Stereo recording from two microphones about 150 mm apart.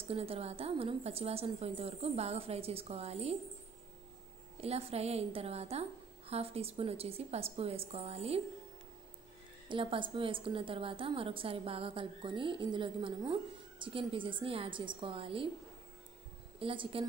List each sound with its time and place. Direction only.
0.1 s a woman's voice: 40° right (ahead or behind)
4.6 s a woman's voice: 40° right (ahead or behind)
9.7 s a woman's voice: 35° right (ahead or behind)
16.5 s a woman's voice: 35° right (ahead or behind)